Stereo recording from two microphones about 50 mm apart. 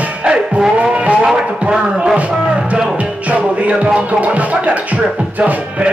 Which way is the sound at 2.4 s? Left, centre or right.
Right.